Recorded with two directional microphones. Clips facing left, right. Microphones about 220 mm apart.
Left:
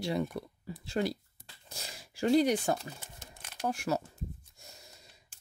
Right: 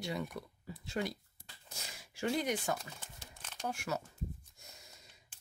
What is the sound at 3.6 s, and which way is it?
Speech, 35° left (ahead or behind).